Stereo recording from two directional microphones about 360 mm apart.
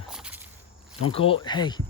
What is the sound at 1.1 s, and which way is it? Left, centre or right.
Speech, centre.